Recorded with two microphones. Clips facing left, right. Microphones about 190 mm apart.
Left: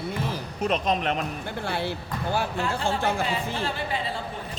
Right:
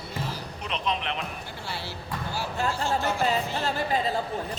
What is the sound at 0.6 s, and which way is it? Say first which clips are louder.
A man's voice: left 7 dB; 45° left (ahead or behind).